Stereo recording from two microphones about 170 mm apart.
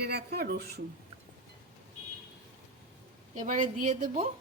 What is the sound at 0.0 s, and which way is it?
Speech, 70° right (ahead or behind).